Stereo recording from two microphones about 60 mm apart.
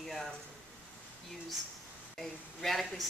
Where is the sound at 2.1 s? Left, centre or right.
Centre.